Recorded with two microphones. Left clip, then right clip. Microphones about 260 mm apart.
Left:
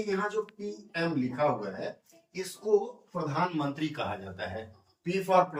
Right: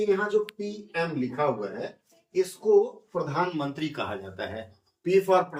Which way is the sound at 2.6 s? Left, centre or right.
Right.